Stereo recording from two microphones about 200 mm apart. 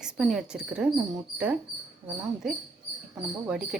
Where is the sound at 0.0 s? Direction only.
Centre (ahead or behind).